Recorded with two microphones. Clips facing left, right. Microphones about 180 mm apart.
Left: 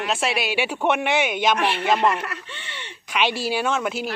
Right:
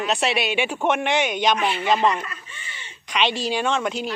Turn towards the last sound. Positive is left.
turn(degrees=5)  # may be behind; listen again after turning